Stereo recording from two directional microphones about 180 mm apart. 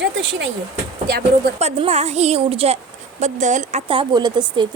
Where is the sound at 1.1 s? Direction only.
60° right (ahead or behind).